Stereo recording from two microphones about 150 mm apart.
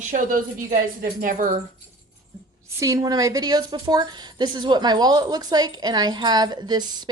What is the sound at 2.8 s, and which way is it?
Speech, 20° right (ahead or behind).